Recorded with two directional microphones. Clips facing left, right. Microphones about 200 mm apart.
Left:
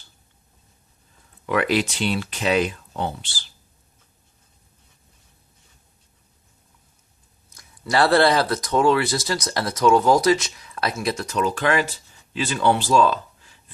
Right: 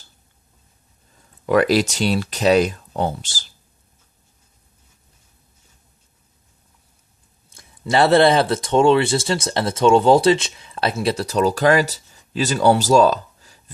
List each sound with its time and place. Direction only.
1.5 s speech: 40° right (ahead or behind)
7.5 s speech: 25° right (ahead or behind); by 13.6 s 40° right (ahead or behind)